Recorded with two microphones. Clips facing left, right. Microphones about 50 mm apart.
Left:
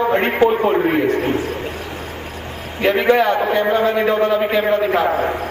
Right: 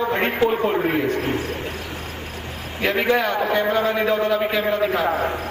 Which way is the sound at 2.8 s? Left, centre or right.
Left.